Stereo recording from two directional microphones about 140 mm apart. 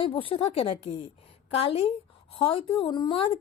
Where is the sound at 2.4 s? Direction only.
40° left (ahead or behind).